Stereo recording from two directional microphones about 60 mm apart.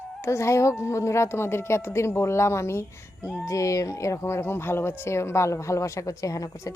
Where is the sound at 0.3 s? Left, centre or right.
Left.